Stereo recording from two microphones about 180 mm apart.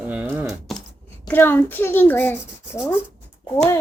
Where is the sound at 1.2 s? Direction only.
10° left (ahead or behind).